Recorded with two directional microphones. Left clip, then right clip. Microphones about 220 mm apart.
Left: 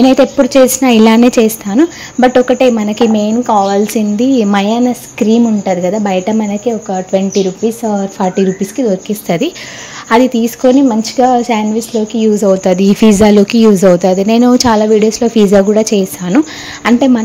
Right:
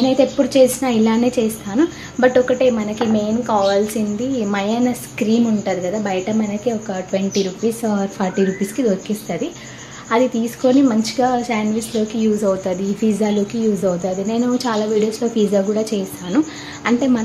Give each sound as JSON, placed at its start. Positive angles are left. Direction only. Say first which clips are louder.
{"t": 0.0, "sound": "a woman's voice", "louder": "left 8 dB", "side_deg": 35}